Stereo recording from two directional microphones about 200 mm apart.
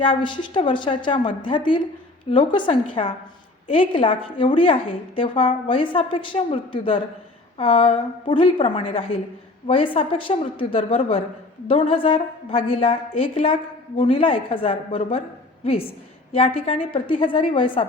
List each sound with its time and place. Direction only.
0.0 s a woman's voice: 25° left (ahead or behind)
16.3 s a woman's voice: 30° left (ahead or behind)